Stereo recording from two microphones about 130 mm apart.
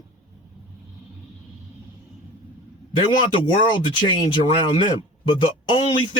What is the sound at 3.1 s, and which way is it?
Speech, 35° left (ahead or behind).